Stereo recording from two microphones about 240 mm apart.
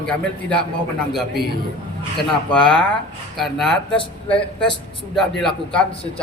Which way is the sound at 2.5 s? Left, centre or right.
Centre.